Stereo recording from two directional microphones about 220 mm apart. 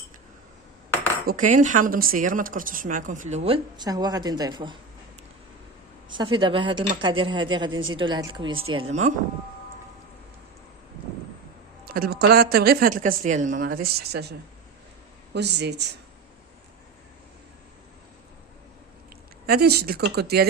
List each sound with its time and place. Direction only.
1.3 s speech: 35° right (ahead or behind); by 4.8 s 20° right (ahead or behind)
6.3 s speech: 20° right (ahead or behind)
7.7 s a woman's voice: 60° right (ahead or behind)
7.9 s speech: 20° right (ahead or behind)
11.9 s speech: 45° right (ahead or behind)
19.5 s speech: 45° right (ahead or behind)